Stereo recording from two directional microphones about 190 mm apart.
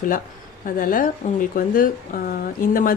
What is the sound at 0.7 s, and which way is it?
A woman's voice, 45° left (ahead or behind).